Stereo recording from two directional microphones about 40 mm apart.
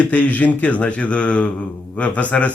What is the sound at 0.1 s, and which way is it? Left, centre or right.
Speech, left.